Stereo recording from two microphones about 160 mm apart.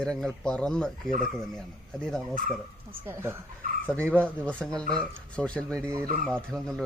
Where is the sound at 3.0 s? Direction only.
15° right (ahead or behind).